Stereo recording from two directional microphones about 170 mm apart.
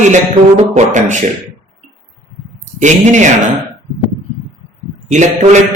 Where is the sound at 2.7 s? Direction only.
45° right (ahead or behind).